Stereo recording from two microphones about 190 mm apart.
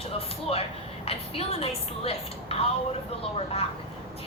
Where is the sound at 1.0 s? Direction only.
30° left (ahead or behind).